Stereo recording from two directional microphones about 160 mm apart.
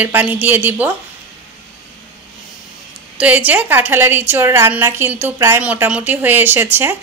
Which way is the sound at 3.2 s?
10° right (ahead or behind).